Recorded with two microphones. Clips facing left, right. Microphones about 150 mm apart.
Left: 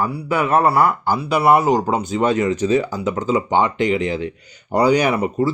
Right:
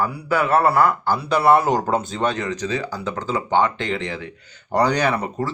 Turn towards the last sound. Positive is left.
turn(degrees=10)  # may be behind; listen again after turning